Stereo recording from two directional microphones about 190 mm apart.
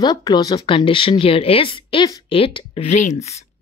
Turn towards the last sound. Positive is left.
turn(degrees=35)  # may be behind; listen again after turning